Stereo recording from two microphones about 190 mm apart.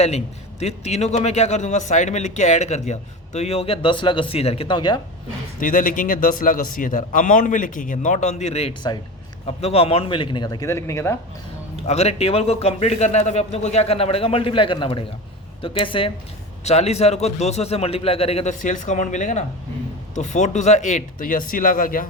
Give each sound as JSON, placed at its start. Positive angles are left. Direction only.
{"t": 0.6, "sound": "a man's voice", "side_deg": 35}
{"t": 5.5, "sound": "a man's voice", "side_deg": 45}
{"t": 11.9, "sound": "a man's voice", "side_deg": 35}